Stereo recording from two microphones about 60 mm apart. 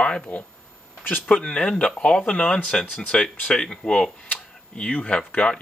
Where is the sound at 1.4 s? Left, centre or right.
Centre.